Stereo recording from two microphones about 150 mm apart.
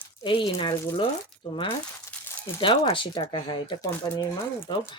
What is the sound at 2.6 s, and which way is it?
Speech, 35° left (ahead or behind).